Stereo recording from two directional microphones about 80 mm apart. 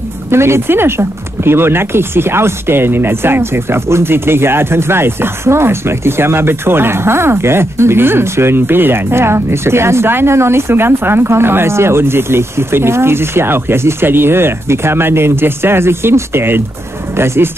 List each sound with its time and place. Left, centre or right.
0.3 s speech: right